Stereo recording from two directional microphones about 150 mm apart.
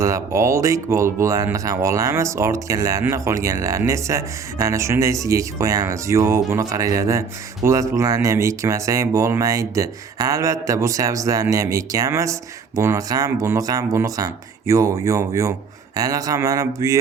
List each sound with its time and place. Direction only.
0.0 s speech: 20° right (ahead or behind)